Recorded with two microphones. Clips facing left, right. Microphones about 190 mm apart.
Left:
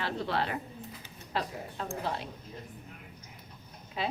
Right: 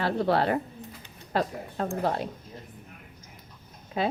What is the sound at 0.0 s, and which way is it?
A woman's voice, 40° right (ahead or behind).